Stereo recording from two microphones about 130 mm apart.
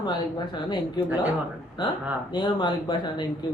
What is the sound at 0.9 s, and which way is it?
Speech, 10° right (ahead or behind).